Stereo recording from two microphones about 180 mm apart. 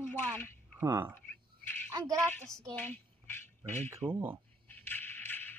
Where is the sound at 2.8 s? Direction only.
10° left (ahead or behind).